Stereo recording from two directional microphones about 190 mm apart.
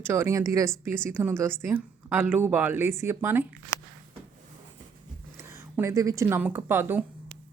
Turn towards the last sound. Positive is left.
turn(degrees=-10)  # may be behind; listen again after turning